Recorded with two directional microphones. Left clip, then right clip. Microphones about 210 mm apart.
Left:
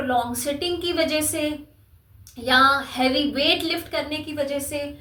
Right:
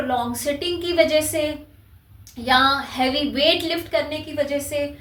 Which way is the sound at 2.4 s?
15° left (ahead or behind).